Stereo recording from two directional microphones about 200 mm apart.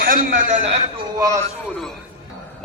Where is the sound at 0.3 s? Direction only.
40° right (ahead or behind).